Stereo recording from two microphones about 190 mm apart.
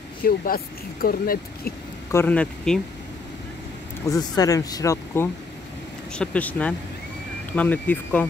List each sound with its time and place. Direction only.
0.2 s speech: 50° left (ahead or behind)
2.0 s speech: 10° left (ahead or behind)
4.1 s speech: 20° left (ahead or behind)